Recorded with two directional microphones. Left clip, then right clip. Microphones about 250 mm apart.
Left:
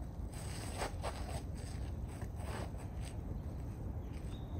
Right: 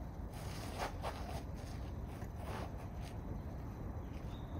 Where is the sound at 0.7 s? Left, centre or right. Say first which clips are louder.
Even; left.